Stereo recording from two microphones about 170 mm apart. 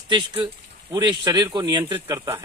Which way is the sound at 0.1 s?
25° right (ahead or behind).